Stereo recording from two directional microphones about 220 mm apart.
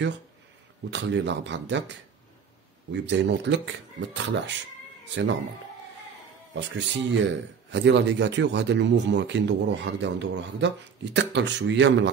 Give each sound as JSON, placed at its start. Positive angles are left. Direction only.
{"t": 0.8, "sound": "speech", "side_deg": -55}
{"t": 6.5, "sound": "speech", "side_deg": -55}